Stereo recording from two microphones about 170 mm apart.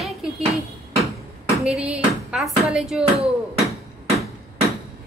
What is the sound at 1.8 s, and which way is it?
Speech, 5° right (ahead or behind).